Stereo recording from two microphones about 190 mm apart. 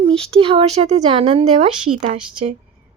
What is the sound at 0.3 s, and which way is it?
A woman's voice, 30° right (ahead or behind).